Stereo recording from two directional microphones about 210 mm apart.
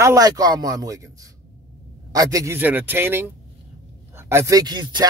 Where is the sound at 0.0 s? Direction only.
15° right (ahead or behind).